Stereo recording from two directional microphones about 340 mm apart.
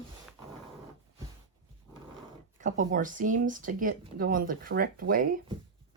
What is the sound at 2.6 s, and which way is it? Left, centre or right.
Speech, right.